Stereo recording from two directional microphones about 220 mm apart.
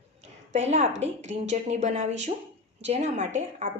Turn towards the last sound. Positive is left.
turn(degrees=-35)  # may be behind; listen again after turning